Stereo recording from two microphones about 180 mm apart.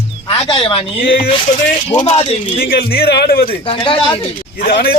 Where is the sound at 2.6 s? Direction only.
60° left (ahead or behind).